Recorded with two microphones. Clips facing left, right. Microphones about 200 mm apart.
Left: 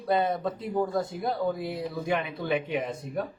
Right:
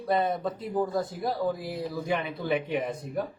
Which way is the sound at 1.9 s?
Centre (ahead or behind).